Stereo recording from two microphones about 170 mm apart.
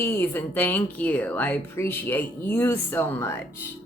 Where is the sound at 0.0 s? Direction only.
15° left (ahead or behind).